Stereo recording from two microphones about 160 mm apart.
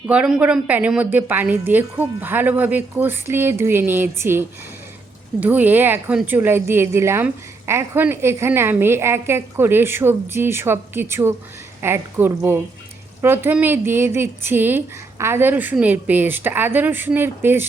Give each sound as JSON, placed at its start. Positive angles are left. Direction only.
{"t": 0.1, "sound": "a woman's voice", "side_deg": -5}